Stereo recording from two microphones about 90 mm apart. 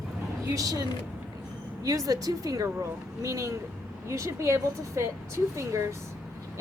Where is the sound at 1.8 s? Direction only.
40° right (ahead or behind).